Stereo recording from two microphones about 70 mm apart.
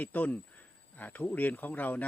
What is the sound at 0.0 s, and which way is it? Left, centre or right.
Speech, left.